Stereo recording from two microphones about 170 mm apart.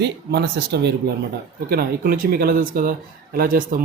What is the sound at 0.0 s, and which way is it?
Speech, 80° right.